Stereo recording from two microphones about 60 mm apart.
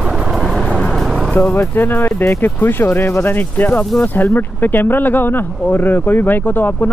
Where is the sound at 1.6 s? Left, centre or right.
Left.